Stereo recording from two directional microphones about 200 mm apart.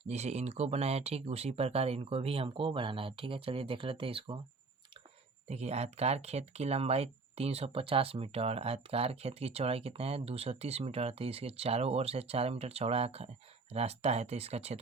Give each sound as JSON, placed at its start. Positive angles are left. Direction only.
{"t": 0.0, "sound": "speech", "side_deg": -35}
{"t": 5.5, "sound": "speech", "side_deg": -35}